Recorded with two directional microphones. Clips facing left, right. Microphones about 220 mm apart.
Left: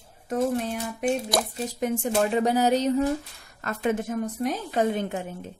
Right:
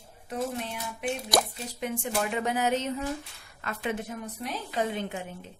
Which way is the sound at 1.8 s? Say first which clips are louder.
Left 6 dB; 45° left (ahead or behind).